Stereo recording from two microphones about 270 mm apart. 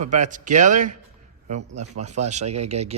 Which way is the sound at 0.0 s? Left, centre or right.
Right.